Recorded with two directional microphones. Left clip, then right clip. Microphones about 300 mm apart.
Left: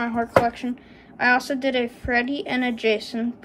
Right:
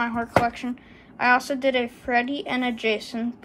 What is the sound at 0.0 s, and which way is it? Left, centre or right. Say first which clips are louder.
A woman's voice: left 2 dB; centre.